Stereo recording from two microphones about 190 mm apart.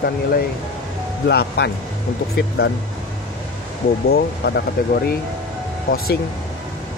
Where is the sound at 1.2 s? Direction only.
60° left (ahead or behind).